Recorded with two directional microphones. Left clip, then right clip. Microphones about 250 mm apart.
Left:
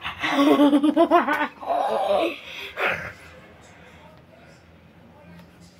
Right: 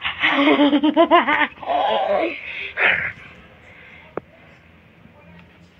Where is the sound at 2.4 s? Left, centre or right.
Left.